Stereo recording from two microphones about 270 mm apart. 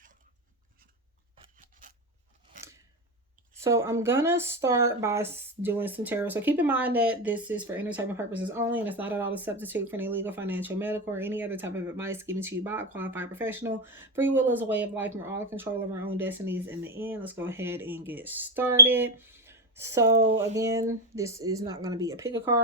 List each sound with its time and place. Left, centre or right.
1.4 s scissors: right
3.6 s speech: centre